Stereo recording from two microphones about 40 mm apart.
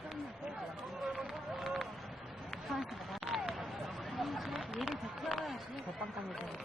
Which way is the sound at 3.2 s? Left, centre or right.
Centre.